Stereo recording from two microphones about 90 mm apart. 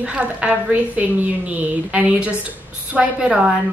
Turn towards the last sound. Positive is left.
turn(degrees=-10)  # may be behind; listen again after turning